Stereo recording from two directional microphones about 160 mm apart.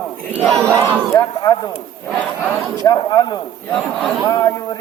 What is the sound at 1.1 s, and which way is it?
Speech, 25° left (ahead or behind).